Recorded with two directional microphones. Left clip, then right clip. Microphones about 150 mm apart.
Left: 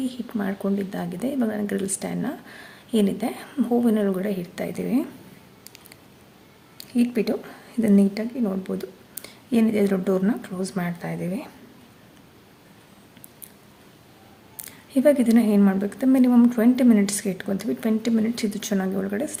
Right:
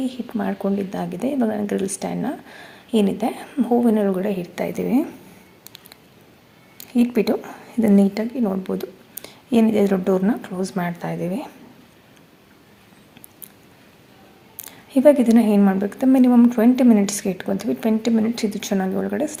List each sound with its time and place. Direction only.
0.0 s speech: 10° right (ahead or behind)
6.9 s speech: 20° right (ahead or behind)
14.6 s speech: 10° right (ahead or behind)